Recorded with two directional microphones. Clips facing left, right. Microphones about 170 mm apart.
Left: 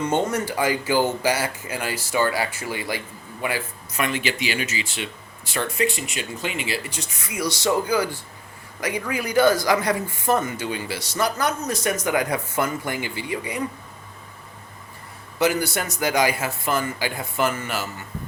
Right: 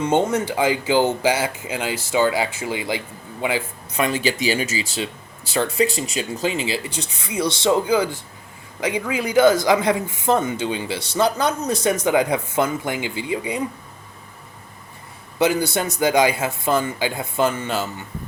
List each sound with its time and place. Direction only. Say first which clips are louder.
0.1 s speech: right 4 dB; 20° right (ahead or behind)
15.4 s speech: right 3 dB; 25° right (ahead or behind)